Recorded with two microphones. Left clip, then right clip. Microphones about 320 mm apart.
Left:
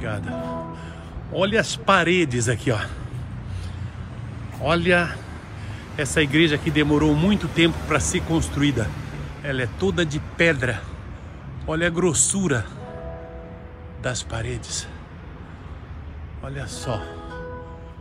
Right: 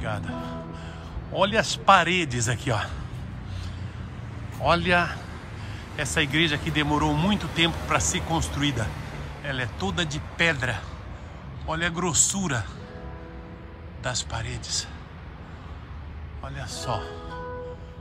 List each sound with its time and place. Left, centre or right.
0.0 s speech: centre
4.6 s speech: centre
8.9 s a sound: right
9.5 s a man's voice: centre
14.0 s a man's voice: centre
16.4 s a man's voice: centre